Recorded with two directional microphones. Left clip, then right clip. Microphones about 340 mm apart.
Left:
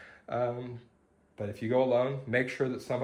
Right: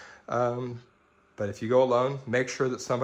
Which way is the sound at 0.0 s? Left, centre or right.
Centre.